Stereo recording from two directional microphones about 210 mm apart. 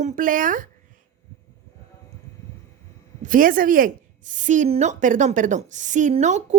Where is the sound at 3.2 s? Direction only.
40° right (ahead or behind).